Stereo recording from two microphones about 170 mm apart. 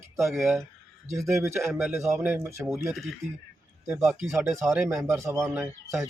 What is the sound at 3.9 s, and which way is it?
Speech, 10° right (ahead or behind).